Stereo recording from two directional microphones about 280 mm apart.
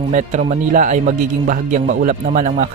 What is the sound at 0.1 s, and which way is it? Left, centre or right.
Speech, right.